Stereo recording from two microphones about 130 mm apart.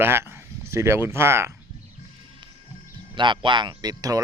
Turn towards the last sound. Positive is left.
turn(degrees=-30)  # may be behind; listen again after turning